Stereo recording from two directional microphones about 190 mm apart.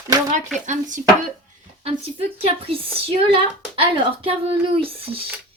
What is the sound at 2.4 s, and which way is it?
A woman's voice, 30° right (ahead or behind).